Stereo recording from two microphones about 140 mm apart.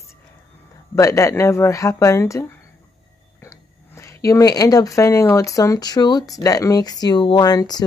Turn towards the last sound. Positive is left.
turn(degrees=30)  # may be behind; listen again after turning